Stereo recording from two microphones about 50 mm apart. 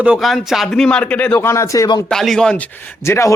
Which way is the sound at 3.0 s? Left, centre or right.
Left.